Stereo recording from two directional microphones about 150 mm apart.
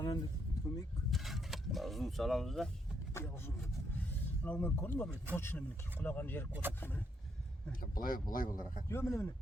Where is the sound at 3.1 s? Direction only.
15° left (ahead or behind).